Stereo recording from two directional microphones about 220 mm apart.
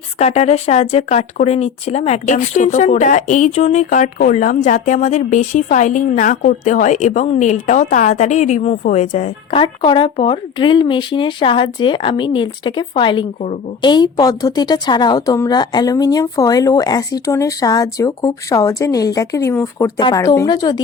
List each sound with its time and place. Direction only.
0.2 s a woman's voice: 30° left (ahead or behind)